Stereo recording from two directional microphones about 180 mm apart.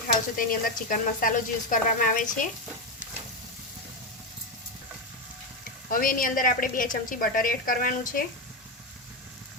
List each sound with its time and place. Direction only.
0.3 s a woman's voice: 50° left (ahead or behind)
5.9 s a woman's voice: 50° left (ahead or behind)